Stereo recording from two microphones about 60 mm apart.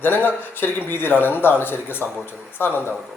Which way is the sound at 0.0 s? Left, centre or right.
Left.